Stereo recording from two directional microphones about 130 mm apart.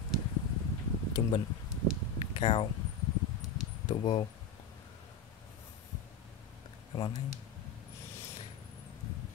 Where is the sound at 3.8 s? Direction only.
40° left (ahead or behind).